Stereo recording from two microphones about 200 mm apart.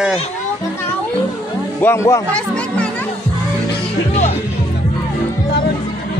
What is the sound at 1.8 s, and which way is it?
Speech, 15° left (ahead or behind).